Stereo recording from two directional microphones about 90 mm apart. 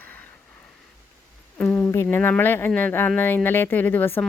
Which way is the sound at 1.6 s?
15° left (ahead or behind).